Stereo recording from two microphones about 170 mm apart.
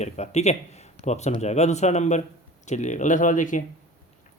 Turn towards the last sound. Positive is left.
turn(degrees=50)  # may be behind; listen again after turning